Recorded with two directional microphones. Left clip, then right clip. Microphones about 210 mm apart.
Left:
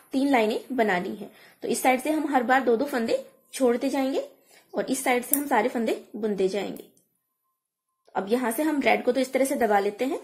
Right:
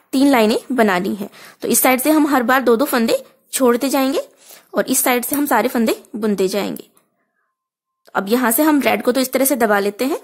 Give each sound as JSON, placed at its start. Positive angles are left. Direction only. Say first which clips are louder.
{"t": 0.1, "sound": "a woman's voice", "louder": "right 9 dB", "side_deg": -40}
{"t": 8.0, "sound": "a woman's voice", "louder": "right 9 dB", "side_deg": -40}